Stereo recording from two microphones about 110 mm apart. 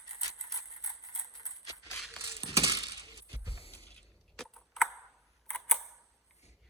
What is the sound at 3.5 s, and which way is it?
Mechanisms, 60° left (ahead or behind).